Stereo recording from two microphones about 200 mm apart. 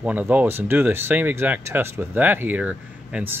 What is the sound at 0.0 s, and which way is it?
Speech, 10° right (ahead or behind).